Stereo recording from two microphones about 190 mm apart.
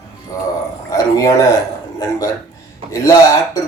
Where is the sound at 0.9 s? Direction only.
20° left (ahead or behind).